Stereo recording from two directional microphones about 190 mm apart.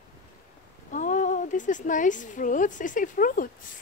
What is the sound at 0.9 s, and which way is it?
A woman's voice, 40° left (ahead or behind).